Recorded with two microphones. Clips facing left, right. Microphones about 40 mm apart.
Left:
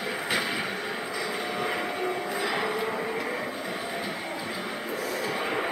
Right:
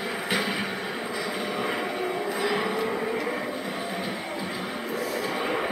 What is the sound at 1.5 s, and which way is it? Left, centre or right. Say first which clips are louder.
Vehicle: right 1 dB; centre.